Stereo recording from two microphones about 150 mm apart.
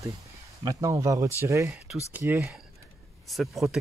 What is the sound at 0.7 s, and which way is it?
Speech, 20° right (ahead or behind).